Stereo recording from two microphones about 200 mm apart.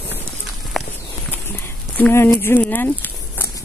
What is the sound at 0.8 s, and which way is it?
Walk, centre (ahead or behind).